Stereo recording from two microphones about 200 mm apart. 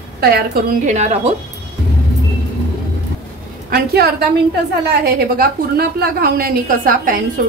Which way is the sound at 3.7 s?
50° right (ahead or behind).